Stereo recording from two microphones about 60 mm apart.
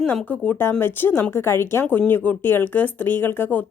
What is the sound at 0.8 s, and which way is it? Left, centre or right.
A woman's voice, left.